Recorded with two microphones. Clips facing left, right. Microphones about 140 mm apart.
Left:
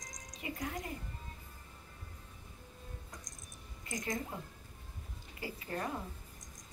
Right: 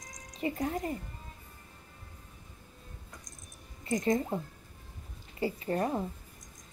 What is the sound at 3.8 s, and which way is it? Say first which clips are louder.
Speech: right 10 dB; 30° right (ahead or behind).